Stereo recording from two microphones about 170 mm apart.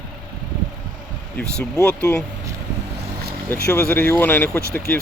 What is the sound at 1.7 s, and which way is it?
Speech, 10° left (ahead or behind).